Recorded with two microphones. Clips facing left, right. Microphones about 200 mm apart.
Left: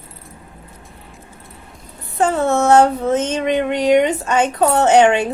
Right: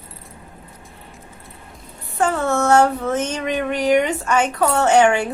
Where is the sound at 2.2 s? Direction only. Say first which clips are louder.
Left 3 dB; 20° left (ahead or behind).